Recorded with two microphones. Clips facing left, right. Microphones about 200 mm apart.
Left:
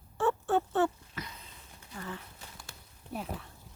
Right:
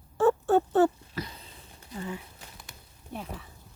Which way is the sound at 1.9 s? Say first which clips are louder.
Right 5 dB; 15° right (ahead or behind).